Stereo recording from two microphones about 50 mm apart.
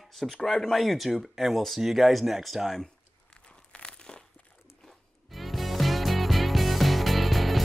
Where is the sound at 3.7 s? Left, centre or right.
Centre.